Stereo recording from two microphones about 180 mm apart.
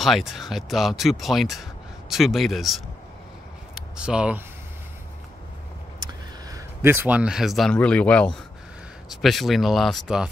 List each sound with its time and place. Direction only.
0.0 s speech: centre (ahead or behind)
5.9 s vehicle: 25° right (ahead or behind)
6.8 s speech: 10° right (ahead or behind)